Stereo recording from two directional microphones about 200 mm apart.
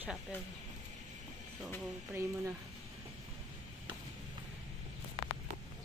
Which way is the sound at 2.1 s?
15° right (ahead or behind).